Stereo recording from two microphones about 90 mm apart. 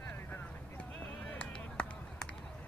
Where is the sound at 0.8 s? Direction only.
15° left (ahead or behind).